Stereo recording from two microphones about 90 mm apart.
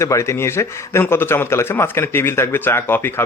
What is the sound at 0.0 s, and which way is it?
A man's voice, 35° left (ahead or behind).